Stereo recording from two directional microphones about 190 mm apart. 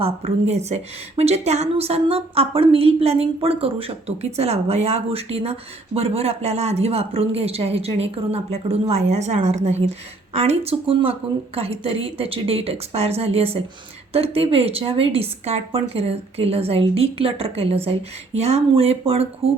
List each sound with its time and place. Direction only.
0.0 s a woman's voice: 35° right (ahead or behind)